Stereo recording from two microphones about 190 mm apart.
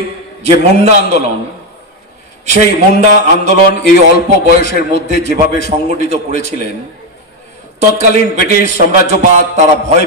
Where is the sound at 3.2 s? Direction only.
40° right (ahead or behind).